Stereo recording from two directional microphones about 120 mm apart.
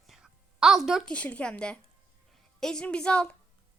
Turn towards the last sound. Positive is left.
turn(degrees=10)  # may be behind; listen again after turning